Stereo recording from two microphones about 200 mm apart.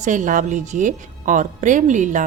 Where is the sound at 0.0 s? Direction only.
40° right (ahead or behind).